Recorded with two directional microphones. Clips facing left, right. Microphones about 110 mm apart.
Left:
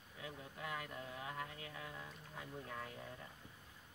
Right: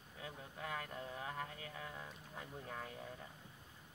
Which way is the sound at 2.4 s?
25° right (ahead or behind).